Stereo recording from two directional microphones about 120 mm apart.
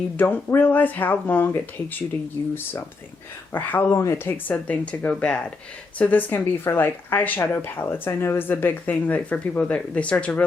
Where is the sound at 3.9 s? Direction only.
25° left (ahead or behind).